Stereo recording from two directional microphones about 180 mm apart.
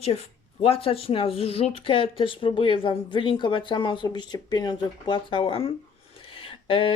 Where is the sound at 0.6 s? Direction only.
30° left (ahead or behind).